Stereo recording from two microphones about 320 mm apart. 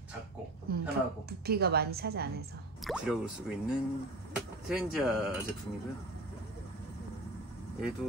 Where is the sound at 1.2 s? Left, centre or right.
Right.